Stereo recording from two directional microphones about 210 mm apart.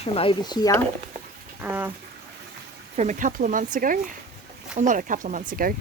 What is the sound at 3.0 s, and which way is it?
Speech, 35° right (ahead or behind).